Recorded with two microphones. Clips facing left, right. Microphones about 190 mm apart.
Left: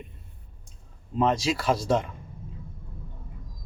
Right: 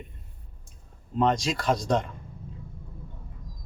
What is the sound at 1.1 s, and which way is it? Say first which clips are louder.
Speech: even; 5° left (ahead or behind).